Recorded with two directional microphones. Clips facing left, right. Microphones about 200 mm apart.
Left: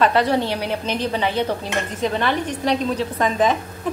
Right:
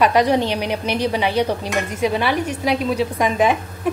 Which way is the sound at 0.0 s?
15° right (ahead or behind).